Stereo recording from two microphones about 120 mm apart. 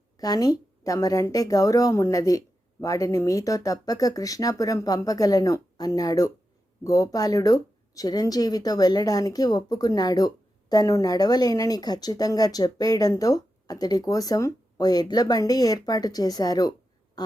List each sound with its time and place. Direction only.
0.2 s speech: 30° left (ahead or behind)